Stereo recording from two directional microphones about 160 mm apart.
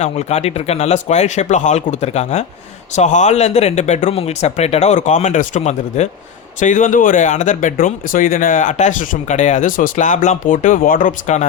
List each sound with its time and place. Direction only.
0.0 s speech: 45° left (ahead or behind)